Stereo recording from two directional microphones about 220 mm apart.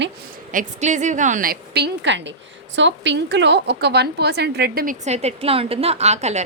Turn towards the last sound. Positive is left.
turn(degrees=-30)  # may be behind; listen again after turning